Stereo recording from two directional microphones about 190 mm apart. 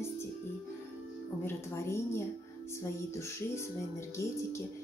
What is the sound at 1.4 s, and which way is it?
Speech, 15° left (ahead or behind).